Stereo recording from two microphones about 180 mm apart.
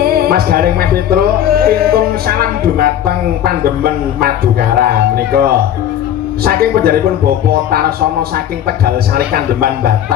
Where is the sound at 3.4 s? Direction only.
55° right (ahead or behind).